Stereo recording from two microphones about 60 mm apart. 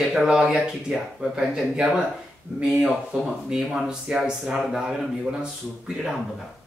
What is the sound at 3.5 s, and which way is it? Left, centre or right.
Speech, centre.